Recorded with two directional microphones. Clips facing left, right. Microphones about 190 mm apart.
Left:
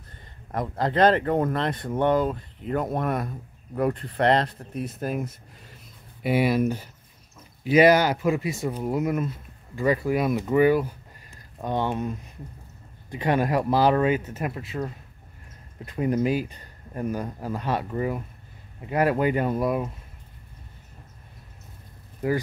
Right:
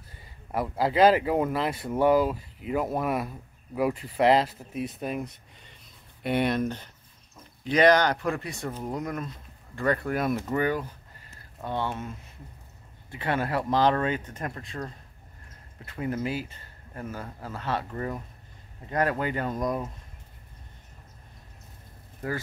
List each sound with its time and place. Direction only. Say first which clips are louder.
0.1 s speech: even; 5° right (ahead or behind)
10.5 s speech: left 7 dB; 10° left (ahead or behind)
13.1 s speech: left 5 dB; 15° left (ahead or behind)